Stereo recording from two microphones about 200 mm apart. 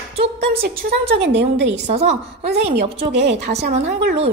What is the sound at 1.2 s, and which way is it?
Speech, 60° right (ahead or behind).